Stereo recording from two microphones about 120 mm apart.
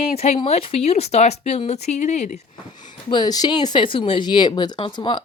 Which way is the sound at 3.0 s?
40° left (ahead or behind).